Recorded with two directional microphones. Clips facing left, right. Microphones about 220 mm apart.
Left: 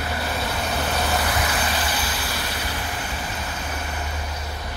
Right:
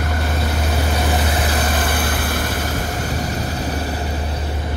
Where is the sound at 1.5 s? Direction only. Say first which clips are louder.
Right 5 dB; 45° right (ahead or behind).